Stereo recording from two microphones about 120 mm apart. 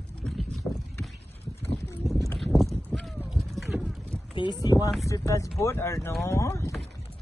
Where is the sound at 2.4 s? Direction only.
Centre (ahead or behind).